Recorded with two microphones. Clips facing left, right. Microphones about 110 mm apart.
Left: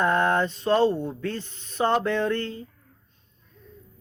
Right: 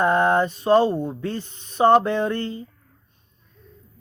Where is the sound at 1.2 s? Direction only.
15° right (ahead or behind).